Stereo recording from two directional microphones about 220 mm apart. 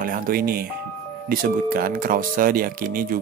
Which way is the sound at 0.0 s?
40° right (ahead or behind).